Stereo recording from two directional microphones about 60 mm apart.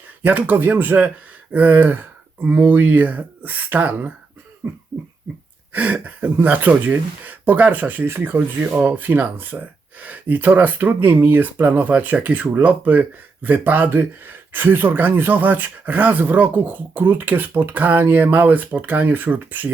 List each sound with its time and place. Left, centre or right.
0.2 s speech: right
8.0 s speech: right